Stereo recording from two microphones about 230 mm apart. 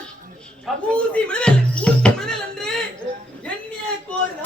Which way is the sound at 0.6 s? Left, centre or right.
Centre.